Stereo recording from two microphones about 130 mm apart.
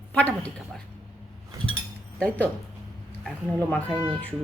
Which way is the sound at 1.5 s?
25° right (ahead or behind).